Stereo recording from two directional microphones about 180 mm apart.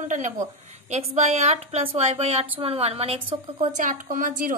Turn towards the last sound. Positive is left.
turn(degrees=-50)  # may be behind; listen again after turning